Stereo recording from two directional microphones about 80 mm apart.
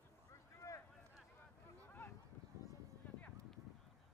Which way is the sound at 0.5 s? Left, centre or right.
Left.